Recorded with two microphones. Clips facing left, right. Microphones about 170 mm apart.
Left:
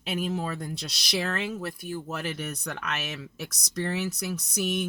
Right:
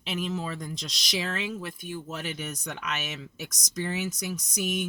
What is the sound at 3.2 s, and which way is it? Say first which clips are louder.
Speech: left 2 dB; 65° left (ahead or behind).